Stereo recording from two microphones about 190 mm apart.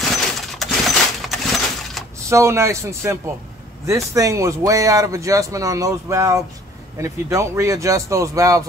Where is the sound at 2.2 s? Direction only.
15° right (ahead or behind).